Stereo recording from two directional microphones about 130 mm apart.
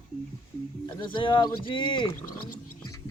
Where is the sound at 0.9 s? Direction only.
35° left (ahead or behind).